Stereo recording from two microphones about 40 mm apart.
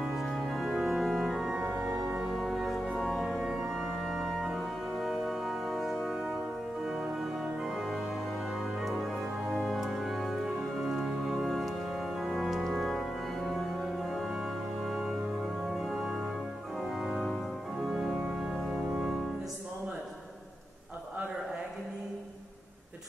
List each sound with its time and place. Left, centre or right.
0.0 s music: centre
3.3 s organ: centre
6.9 s music: centre
7.6 s organ: centre
8.8 s music: centre
10.4 s music: centre
11.4 s music: centre
12.2 s organ: centre
14.3 s music: centre
16.8 s organ: centre
18.3 s organ: right